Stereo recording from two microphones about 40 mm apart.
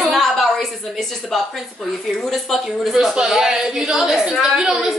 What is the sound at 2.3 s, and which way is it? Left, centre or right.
A woman's voice, centre.